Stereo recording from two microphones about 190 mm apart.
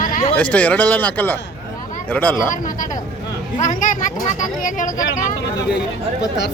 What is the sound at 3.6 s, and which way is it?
Speech, 40° left (ahead or behind).